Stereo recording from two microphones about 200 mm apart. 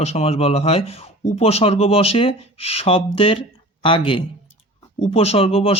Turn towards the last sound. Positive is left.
turn(degrees=30)  # may be behind; listen again after turning